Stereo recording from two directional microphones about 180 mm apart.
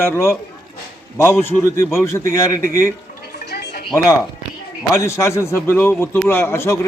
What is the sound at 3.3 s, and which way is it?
Gargling, 65° left (ahead or behind).